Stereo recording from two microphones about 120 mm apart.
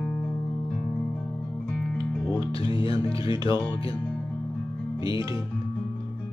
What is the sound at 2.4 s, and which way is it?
Music, 45° left (ahead or behind).